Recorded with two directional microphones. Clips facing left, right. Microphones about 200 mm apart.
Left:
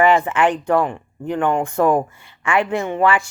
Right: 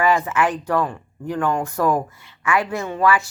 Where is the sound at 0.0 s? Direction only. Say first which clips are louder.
Left 4 dB; 25° left (ahead or behind).